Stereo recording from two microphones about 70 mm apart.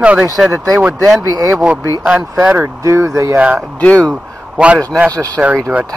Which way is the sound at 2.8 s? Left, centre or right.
Right.